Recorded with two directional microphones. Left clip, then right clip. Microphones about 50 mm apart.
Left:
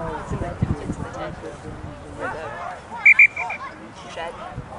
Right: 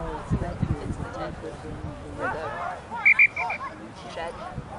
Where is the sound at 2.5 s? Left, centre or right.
Left.